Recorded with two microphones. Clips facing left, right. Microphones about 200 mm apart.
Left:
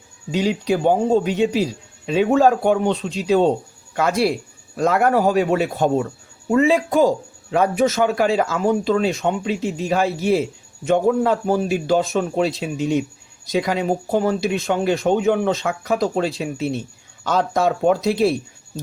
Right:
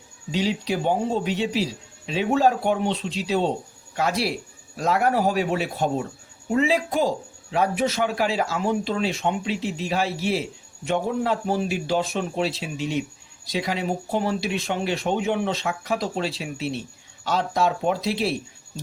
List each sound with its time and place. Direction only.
0.3 s speech: 50° left (ahead or behind)